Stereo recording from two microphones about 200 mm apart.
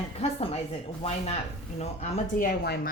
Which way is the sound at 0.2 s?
30° left (ahead or behind).